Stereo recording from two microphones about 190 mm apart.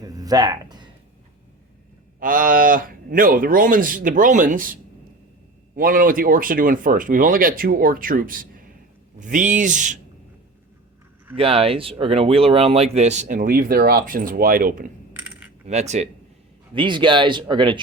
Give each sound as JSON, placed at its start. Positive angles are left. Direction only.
{"t": 0.0, "sound": "a sound", "side_deg": -20}
{"t": 2.1, "sound": "speech", "side_deg": -45}
{"t": 11.3, "sound": "speech", "side_deg": -30}
{"t": 15.1, "sound": "coin", "side_deg": -10}
{"t": 15.6, "sound": "speech", "side_deg": -35}
{"t": 16.7, "sound": "speech", "side_deg": -25}